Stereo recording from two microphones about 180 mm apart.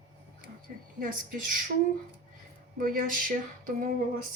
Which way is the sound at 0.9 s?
50° right (ahead or behind).